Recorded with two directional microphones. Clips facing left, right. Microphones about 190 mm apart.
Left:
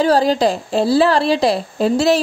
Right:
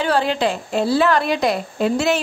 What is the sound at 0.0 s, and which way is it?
Speech, 40° left (ahead or behind).